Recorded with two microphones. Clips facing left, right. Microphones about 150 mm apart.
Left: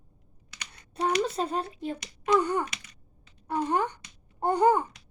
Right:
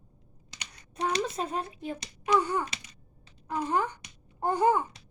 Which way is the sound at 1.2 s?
35° left (ahead or behind).